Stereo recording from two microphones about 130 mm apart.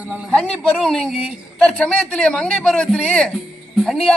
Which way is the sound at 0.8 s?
5° left (ahead or behind).